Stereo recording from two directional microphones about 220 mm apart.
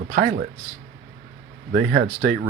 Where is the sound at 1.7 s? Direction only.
45° right (ahead or behind).